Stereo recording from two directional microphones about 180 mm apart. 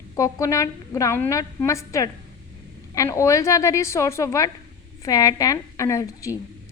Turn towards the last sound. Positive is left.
turn(degrees=15)  # may be behind; listen again after turning